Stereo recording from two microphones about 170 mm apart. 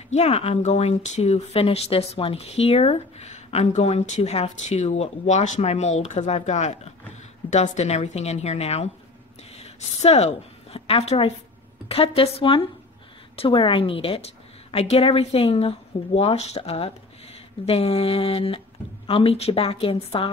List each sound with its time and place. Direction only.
0.1 s a woman's voice: 40° left (ahead or behind)